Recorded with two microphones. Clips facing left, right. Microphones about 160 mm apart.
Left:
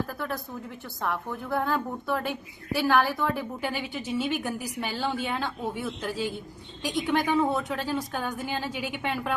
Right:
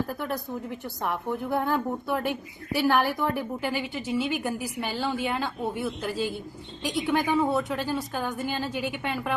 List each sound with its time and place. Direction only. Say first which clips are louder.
1.0 s a woman's voice: right 2 dB; 15° right (ahead or behind)